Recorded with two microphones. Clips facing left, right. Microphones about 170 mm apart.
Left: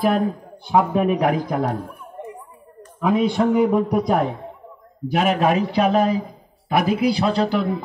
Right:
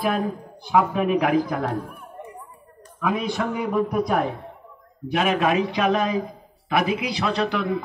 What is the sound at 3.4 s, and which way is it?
Speech, 30° left (ahead or behind).